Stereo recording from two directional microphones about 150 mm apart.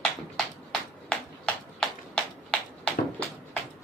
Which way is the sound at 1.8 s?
5° left (ahead or behind).